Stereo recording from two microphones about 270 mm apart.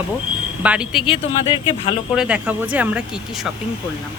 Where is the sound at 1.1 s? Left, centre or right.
Centre.